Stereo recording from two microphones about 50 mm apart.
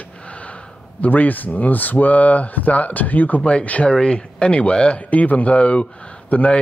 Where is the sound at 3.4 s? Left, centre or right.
Left.